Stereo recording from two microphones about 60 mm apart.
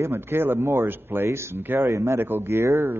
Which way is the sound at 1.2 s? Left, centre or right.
Right.